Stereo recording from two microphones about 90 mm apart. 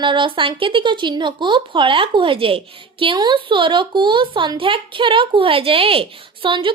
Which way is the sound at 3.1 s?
60° right (ahead or behind).